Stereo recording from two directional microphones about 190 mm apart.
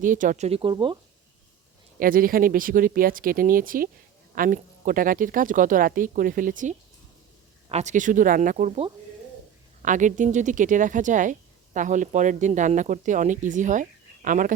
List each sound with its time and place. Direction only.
0.0 s speech: 45° right (ahead or behind); by 0.9 s 25° right (ahead or behind)
2.0 s speech: 50° right (ahead or behind)